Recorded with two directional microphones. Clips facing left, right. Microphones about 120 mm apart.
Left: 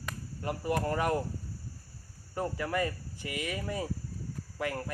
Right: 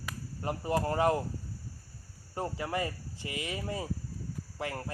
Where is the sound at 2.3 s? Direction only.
25° right (ahead or behind).